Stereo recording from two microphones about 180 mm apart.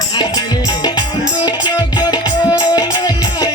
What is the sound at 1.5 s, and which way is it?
Music, 20° left (ahead or behind).